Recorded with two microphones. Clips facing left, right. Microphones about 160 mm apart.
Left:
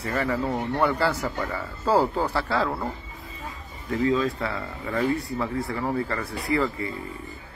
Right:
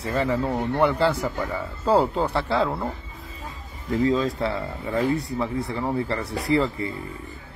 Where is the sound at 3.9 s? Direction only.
30° right (ahead or behind).